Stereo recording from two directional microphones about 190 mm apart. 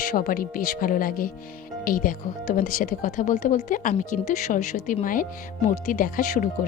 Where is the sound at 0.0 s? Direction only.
45° left (ahead or behind).